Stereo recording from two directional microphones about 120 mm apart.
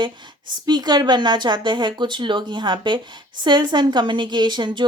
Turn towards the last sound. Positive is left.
turn(degrees=-40)  # may be behind; listen again after turning